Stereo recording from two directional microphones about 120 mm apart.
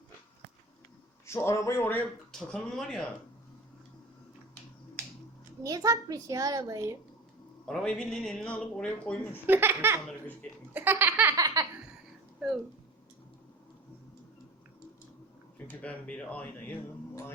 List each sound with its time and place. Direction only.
1.3 s speech: 25° left (ahead or behind)
2.3 s speech: 5° left (ahead or behind)
5.6 s a child's voice: 30° right (ahead or behind)
7.7 s speech: 5° left (ahead or behind)
9.5 s a child's voice: 20° right (ahead or behind)
10.8 s laughter: 15° right (ahead or behind)
11.3 s laughter: 30° right (ahead or behind)
12.4 s speech: 5° right (ahead or behind)
15.5 s speech: 15° left (ahead or behind)